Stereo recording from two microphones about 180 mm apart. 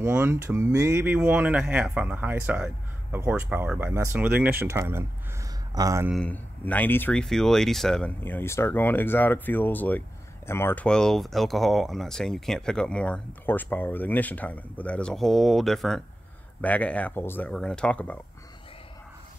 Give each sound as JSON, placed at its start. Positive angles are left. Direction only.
{"t": 0.0, "sound": "speech", "side_deg": -10}
{"t": 6.1, "sound": "speech", "side_deg": 10}